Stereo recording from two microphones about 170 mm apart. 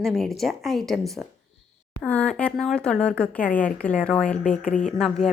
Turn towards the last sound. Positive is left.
turn(degrees=0)  # may be behind; listen again after turning